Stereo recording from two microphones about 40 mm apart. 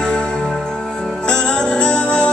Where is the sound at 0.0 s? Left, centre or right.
Centre.